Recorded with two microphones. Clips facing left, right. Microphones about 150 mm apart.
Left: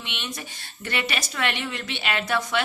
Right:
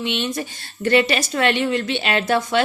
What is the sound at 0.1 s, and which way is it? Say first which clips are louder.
A woman's voice: right 11 dB; 30° right (ahead or behind).